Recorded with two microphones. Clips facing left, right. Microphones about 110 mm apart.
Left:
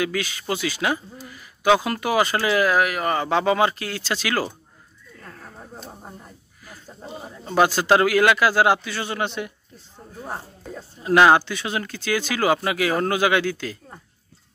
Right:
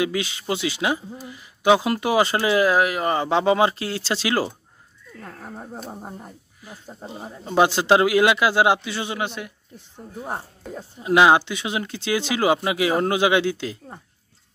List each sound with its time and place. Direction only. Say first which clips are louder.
0.0 s speech: right 1 dB; 25° right (ahead or behind)
5.2 s a sound: right 5 dB; 25° right (ahead or behind)
5.9 s speech: right 5 dB; 25° right (ahead or behind)
9.2 s speech: left 2 dB; 5° right (ahead or behind)
9.8 s speech: right 4 dB; 15° right (ahead or behind)